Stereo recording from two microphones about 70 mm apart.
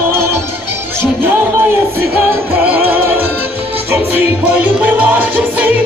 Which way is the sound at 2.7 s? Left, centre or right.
Right.